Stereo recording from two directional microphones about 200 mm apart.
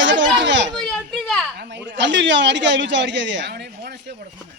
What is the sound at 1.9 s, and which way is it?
A man's voice, 60° right (ahead or behind).